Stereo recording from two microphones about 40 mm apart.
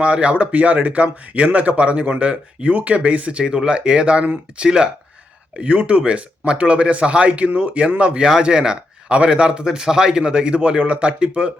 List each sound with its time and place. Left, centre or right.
0.0 s speech: right
8.2 s a man's voice: centre